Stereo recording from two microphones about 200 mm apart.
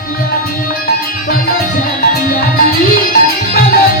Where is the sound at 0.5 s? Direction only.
45° left (ahead or behind).